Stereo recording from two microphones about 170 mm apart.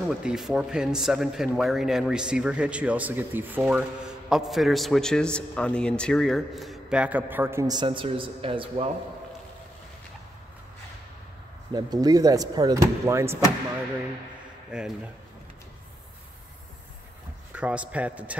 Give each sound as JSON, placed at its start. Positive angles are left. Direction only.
{"t": 0.1, "sound": "a man's voice", "side_deg": -5}
{"t": 11.7, "sound": "speech", "side_deg": -20}
{"t": 14.7, "sound": "a man's voice", "side_deg": -5}
{"t": 17.5, "sound": "a man's voice", "side_deg": -5}